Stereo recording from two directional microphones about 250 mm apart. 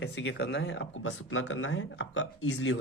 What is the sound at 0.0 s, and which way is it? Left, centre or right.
Speech, left.